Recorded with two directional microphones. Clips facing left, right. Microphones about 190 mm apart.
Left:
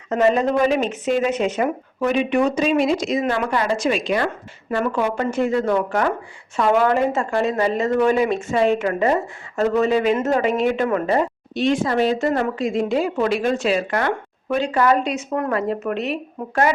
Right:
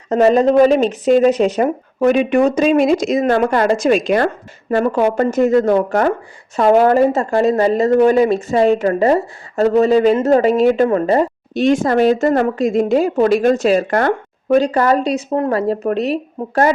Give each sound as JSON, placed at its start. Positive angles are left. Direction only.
{"t": 0.1, "sound": "speech", "side_deg": -40}